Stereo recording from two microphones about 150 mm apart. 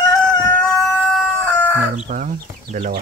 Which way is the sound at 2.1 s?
55° right (ahead or behind).